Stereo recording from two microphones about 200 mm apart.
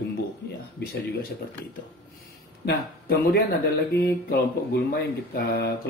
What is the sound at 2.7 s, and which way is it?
Speech, 50° left (ahead or behind).